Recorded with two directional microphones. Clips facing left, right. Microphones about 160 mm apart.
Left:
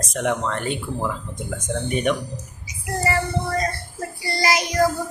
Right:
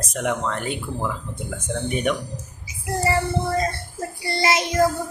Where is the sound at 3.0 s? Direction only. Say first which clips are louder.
Right 1 dB; 25° right (ahead or behind).